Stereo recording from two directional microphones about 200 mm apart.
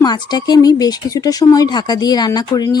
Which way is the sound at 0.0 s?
20° left (ahead or behind).